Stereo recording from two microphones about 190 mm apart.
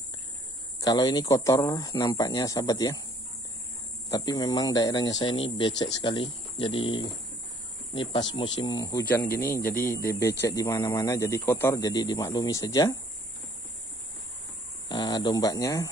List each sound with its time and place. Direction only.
0.7 s speech: 20° left (ahead or behind)
4.1 s speech: 20° left (ahead or behind)
14.9 s speech: 20° left (ahead or behind)